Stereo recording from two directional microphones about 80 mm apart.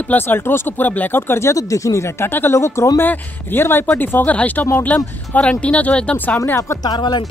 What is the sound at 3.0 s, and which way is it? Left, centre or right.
Speech, left.